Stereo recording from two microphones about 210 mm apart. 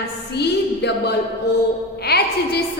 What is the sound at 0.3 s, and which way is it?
A woman's voice, 50° left (ahead or behind).